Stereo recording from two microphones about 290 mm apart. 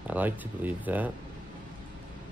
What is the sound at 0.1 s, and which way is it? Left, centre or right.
Speech, centre.